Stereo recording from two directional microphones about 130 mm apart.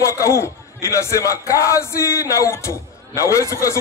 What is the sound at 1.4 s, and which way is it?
A man's voice, 25° left (ahead or behind).